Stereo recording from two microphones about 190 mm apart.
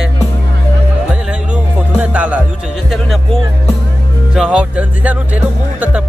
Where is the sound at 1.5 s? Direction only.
5° right (ahead or behind).